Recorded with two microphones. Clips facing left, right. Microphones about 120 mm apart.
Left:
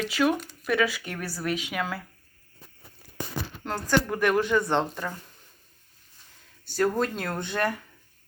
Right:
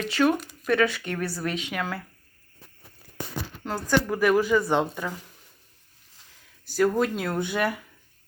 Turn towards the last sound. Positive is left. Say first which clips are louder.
# right 2 dB
turn(degrees=-10)  # may be behind; listen again after turning